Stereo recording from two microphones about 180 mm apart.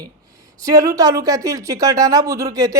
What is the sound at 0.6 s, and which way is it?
Speech, 20° right (ahead or behind).